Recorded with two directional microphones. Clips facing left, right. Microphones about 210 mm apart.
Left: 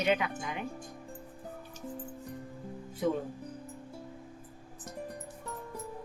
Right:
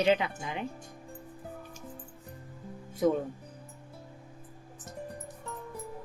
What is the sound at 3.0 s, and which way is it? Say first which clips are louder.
Speech: right 4 dB; 45° right (ahead or behind).